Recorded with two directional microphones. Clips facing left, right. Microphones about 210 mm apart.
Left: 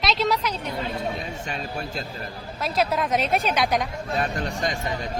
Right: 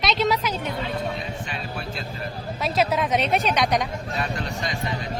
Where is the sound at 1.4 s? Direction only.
45° left (ahead or behind).